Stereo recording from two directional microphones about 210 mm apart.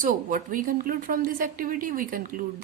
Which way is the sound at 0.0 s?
40° right (ahead or behind).